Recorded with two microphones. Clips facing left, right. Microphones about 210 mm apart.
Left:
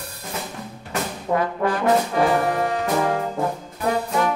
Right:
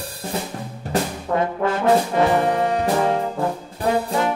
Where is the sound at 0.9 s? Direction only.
25° right (ahead or behind).